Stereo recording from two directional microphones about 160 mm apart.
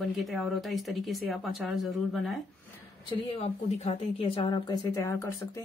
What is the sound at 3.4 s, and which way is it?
Speech, 45° left (ahead or behind).